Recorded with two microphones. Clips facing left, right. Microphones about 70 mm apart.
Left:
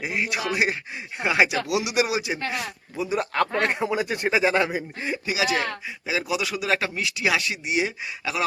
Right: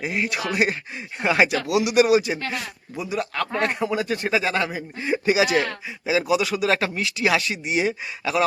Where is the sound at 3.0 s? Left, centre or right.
Left.